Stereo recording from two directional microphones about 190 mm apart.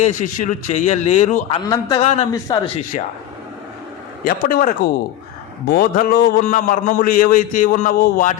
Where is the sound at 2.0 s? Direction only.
30° left (ahead or behind).